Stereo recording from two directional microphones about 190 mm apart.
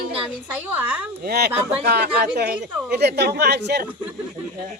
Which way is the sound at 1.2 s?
55° right (ahead or behind).